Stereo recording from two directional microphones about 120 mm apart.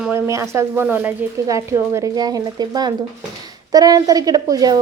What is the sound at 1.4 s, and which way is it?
A woman's voice, 25° right (ahead or behind).